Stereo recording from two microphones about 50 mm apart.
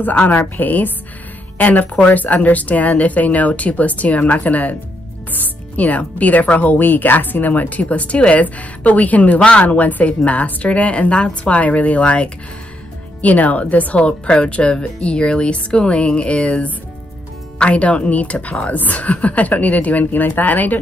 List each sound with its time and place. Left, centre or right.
0.0 s a woman's voice: left
6.8 s a woman's voice: left